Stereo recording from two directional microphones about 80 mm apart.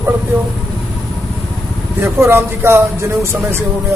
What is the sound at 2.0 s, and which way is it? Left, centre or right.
Speech, right.